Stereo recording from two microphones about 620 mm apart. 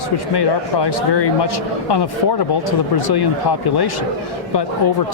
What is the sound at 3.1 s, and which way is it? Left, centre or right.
Speech, left.